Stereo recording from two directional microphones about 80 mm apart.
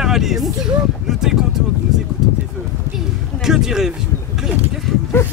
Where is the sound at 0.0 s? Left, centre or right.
Centre.